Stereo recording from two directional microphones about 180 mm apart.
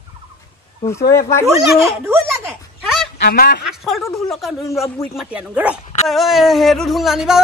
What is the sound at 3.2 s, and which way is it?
Speech, 60° left (ahead or behind).